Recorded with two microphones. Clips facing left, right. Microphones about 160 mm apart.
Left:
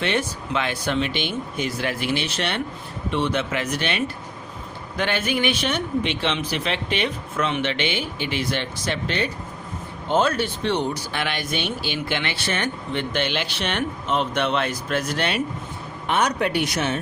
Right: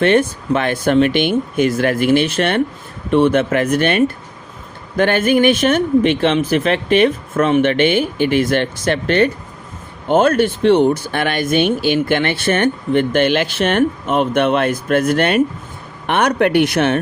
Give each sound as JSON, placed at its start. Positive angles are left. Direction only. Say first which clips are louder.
{"t": 0.0, "sound": "speech", "louder": "right 11 dB", "side_deg": -55}